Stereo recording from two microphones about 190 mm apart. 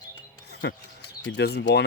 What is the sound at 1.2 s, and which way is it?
Speech, 65° left (ahead or behind).